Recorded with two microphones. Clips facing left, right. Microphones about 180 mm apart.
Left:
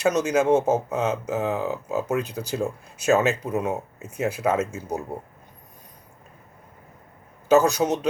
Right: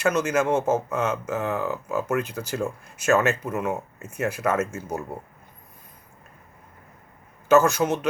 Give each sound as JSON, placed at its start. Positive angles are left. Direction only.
{"t": 0.0, "sound": "speech", "side_deg": 15}
{"t": 7.5, "sound": "speech", "side_deg": 15}